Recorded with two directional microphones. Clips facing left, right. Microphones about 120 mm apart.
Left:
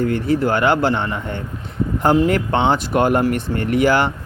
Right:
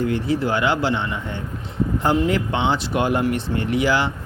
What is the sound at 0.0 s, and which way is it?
Speech, 50° left (ahead or behind).